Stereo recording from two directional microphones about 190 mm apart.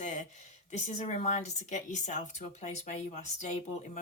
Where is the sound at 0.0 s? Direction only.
40° left (ahead or behind).